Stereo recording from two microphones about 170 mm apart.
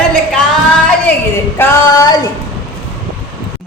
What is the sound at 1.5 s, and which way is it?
Speech, 15° left (ahead or behind).